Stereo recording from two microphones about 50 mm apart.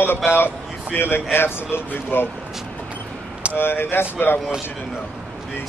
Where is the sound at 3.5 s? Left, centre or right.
Left.